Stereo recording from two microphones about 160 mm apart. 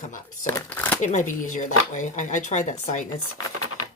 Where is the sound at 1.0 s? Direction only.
50° left (ahead or behind).